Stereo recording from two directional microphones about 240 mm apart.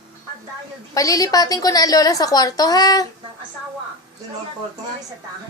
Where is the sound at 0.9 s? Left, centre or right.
Centre.